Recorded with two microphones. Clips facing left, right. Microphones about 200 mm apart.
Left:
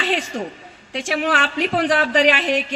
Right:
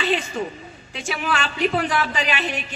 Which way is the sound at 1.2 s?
90° left.